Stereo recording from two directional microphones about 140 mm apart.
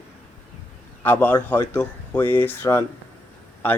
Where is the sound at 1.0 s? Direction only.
10° left (ahead or behind).